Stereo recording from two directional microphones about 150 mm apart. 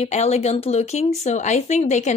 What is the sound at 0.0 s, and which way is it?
A woman's voice, 45° left (ahead or behind).